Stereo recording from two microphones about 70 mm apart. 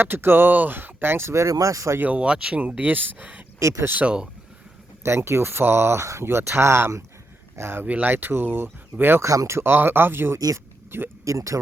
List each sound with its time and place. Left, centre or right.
0.0 s speech: right
2.0 s speech: centre
3.6 s speech: right
3.9 s speech: centre
5.0 s speech: right
7.9 s speech: right
9.2 s speech: right
9.5 s speech: right
10.3 s speech: right
10.9 s speech: right
11.3 s speech: right